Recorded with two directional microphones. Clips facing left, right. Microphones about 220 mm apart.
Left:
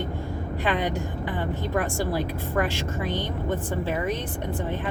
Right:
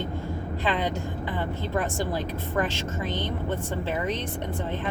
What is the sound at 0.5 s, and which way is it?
A woman's voice, 15° left (ahead or behind).